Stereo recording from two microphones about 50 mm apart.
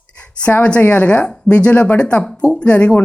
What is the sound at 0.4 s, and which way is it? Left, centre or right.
A woman's voice, left.